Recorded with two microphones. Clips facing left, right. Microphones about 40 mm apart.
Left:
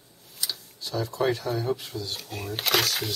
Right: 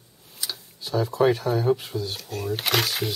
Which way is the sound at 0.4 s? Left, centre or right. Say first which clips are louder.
Even; centre.